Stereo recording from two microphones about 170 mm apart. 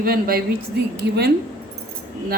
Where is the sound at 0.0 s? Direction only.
60° right (ahead or behind).